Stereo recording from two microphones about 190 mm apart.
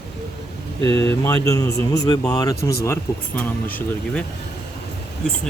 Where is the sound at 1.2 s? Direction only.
15° left (ahead or behind).